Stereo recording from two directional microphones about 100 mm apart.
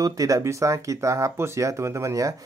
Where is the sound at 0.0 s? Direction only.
35° right (ahead or behind).